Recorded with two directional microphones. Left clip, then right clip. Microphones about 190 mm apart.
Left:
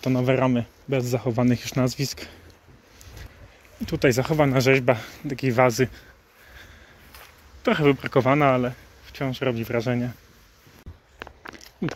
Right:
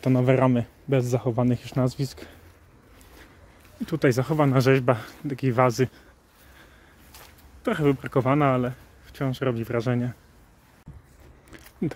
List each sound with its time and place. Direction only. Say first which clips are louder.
0.0 s speech: right 1 dB; 25° right (ahead or behind); by 2.3 s 5° right (ahead or behind)
3.8 s speech: left 2 dB; 20° right (ahead or behind)
7.6 s speech: left 4 dB; 5° right (ahead or behind); by 10.1 s 20° right (ahead or behind)